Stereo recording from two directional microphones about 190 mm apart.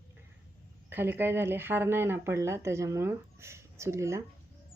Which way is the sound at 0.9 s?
10° right (ahead or behind).